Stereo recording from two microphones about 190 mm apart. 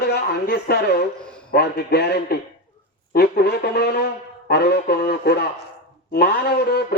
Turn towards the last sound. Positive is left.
turn(degrees=55)  # may be behind; listen again after turning